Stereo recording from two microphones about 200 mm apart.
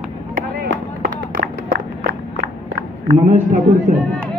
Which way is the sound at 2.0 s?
45° right (ahead or behind).